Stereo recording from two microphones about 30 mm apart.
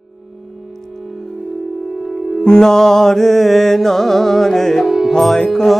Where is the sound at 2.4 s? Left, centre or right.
Left; by 4.6 s centre.